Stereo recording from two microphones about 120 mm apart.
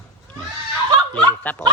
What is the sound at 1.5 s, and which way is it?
Speech, 15° left (ahead or behind).